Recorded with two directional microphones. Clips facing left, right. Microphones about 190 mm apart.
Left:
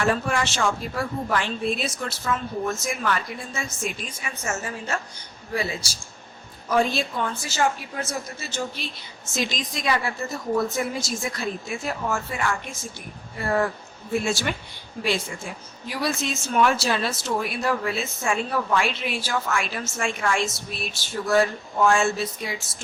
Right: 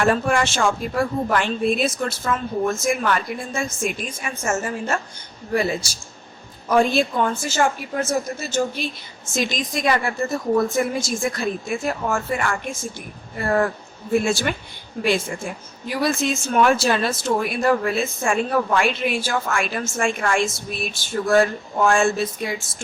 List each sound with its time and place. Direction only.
0.0 s speech: 50° right (ahead or behind)
14.3 s speech: 50° right (ahead or behind)